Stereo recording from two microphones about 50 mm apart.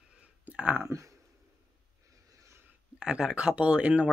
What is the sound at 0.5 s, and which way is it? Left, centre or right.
Speech, right.